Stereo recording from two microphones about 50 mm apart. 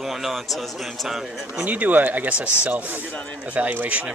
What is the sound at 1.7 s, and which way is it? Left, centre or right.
Speech, right.